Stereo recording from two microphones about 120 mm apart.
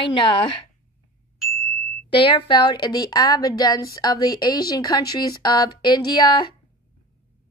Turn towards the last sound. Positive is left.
turn(degrees=40)  # may be behind; listen again after turning